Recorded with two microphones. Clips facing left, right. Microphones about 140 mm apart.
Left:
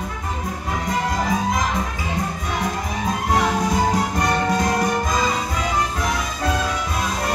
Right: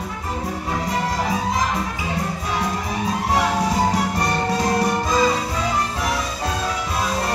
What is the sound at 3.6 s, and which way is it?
Music, 35° right (ahead or behind).